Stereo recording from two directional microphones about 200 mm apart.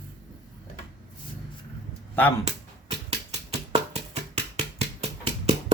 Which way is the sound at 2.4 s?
30° right (ahead or behind).